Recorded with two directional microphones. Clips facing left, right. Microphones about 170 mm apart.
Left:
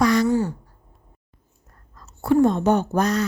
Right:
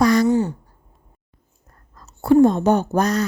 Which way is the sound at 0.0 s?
40° right (ahead or behind).